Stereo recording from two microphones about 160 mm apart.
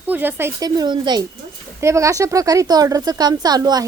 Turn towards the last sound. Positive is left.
turn(degrees=-25)  # may be behind; listen again after turning